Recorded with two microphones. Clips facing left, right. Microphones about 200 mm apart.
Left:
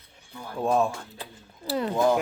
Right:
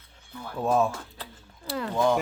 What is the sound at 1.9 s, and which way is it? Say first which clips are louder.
Speech: left 1 dB; 5° left (ahead or behind).